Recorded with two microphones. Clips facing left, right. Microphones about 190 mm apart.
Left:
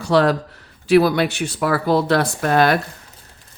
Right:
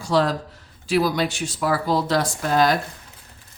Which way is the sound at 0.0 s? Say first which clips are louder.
Left 4 dB; 65° left (ahead or behind).